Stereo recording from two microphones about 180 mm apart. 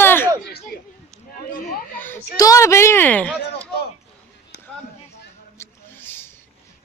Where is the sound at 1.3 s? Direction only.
50° left (ahead or behind).